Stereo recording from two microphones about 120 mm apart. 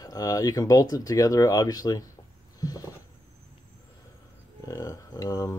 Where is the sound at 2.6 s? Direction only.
30° left (ahead or behind).